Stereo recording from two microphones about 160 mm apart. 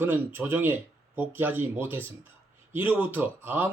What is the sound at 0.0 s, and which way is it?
Speech, 15° right (ahead or behind).